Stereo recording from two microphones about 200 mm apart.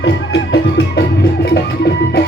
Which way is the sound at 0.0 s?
60° left (ahead or behind).